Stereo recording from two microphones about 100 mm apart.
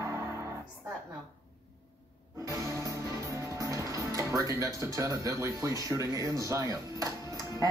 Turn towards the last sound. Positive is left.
turn(degrees=-35)  # may be behind; listen again after turning